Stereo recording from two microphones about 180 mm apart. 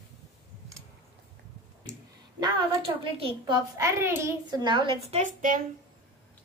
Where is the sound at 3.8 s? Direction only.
15° right (ahead or behind).